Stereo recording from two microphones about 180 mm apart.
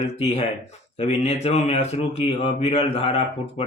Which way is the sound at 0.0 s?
35° left (ahead or behind).